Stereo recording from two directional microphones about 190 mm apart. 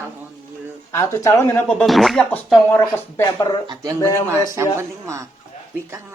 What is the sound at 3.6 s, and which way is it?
Speech, 20° right (ahead or behind).